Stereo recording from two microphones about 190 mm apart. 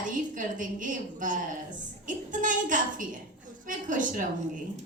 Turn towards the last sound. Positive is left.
turn(degrees=-45)  # may be behind; listen again after turning